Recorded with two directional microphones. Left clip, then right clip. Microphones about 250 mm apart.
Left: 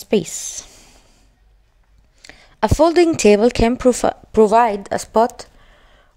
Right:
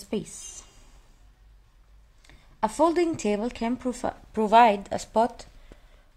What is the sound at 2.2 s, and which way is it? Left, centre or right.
Speech, left.